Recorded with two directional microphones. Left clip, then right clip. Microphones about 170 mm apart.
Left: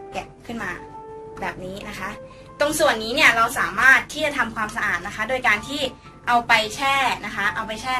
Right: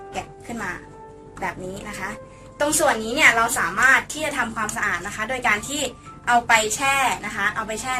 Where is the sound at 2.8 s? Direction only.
20° left (ahead or behind).